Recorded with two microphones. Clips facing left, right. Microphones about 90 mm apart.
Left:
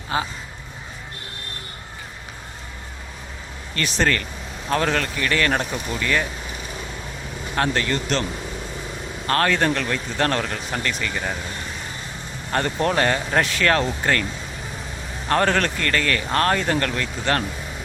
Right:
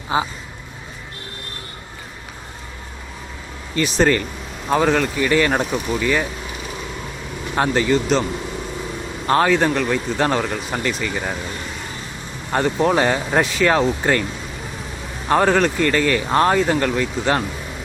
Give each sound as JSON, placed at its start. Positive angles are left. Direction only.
{"t": 0.1, "sound": "a man's voice", "side_deg": -20}
{"t": 3.8, "sound": "speech", "side_deg": -5}
{"t": 7.5, "sound": "speech", "side_deg": -10}
{"t": 9.5, "sound": "speech", "side_deg": -5}
{"t": 12.5, "sound": "speech", "side_deg": -5}
{"t": 15.3, "sound": "speech", "side_deg": -10}